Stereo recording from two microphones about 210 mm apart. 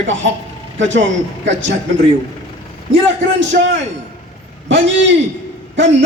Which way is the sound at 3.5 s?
60° right (ahead or behind).